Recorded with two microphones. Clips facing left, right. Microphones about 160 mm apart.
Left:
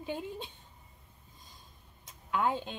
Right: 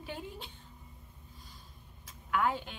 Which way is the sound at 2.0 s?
20° left (ahead or behind).